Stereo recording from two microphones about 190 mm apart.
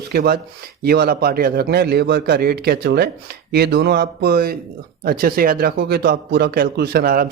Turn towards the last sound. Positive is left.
turn(degrees=-50)  # may be behind; listen again after turning